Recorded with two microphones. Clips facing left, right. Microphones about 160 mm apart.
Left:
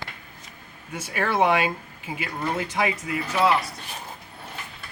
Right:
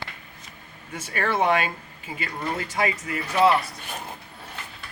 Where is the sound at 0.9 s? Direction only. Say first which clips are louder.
Left 2 dB; 10° left (ahead or behind).